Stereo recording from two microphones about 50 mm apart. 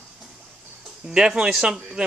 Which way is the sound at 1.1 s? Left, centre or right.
Centre.